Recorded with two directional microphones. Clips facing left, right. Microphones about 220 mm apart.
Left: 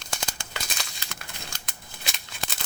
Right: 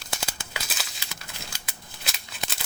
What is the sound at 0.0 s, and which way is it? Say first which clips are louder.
Crumpling: even; 5° right (ahead or behind).